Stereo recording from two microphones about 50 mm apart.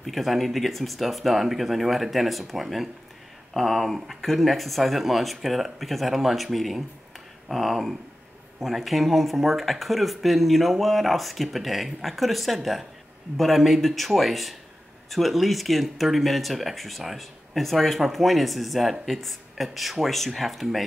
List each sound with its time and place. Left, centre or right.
0.0 s speech: centre